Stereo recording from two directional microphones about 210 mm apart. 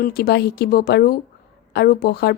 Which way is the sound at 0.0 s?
50° left (ahead or behind).